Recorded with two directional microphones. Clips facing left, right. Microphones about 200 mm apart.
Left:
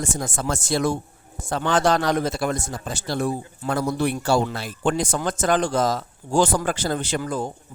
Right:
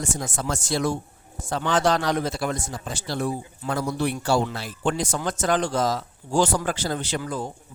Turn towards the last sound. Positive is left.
turn(degrees=50)  # may be behind; listen again after turning